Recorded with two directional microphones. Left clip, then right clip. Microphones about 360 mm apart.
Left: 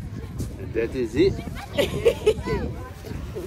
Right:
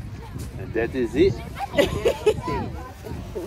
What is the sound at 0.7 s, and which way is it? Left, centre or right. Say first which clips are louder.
Speech: right 1 dB; centre.